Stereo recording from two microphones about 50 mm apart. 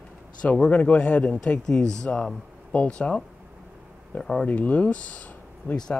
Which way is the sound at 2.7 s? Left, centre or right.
Left.